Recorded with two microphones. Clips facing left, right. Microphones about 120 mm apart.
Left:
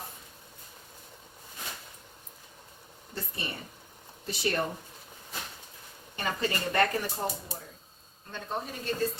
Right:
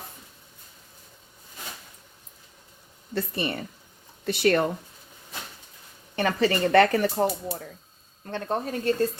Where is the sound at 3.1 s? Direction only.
80° right.